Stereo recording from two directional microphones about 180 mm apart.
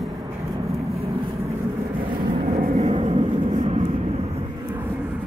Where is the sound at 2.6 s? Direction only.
30° right (ahead or behind).